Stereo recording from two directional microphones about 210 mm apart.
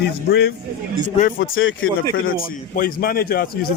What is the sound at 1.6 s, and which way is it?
Speech, 70° left (ahead or behind).